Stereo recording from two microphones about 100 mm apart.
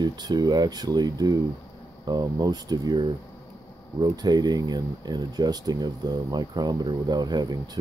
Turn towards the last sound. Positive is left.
turn(degrees=-40)  # may be behind; listen again after turning